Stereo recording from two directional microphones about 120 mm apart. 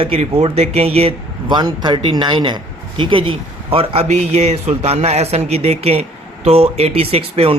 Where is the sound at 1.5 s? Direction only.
40° right (ahead or behind).